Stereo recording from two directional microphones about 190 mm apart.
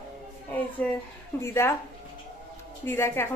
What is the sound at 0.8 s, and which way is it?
Speech, 5° left (ahead or behind).